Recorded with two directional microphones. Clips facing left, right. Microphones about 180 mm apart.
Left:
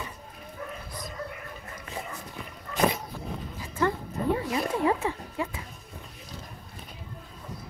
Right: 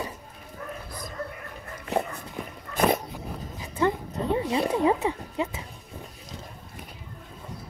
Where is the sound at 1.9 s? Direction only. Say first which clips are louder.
Right 12 dB; 70° right (ahead or behind).